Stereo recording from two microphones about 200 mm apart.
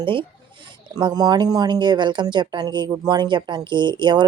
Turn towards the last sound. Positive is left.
turn(degrees=-20)  # may be behind; listen again after turning